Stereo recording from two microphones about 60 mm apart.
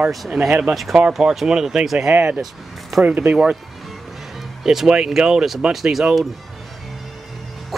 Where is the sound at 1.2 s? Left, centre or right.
Centre.